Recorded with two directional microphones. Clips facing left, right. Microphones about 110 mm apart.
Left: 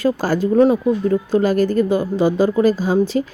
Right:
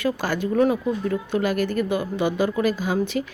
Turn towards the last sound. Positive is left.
turn(degrees=35)  # may be behind; listen again after turning